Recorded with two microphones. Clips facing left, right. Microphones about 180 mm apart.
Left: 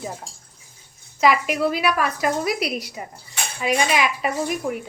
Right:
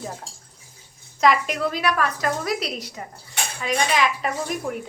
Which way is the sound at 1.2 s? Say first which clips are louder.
Left 1 dB; 5° left (ahead or behind).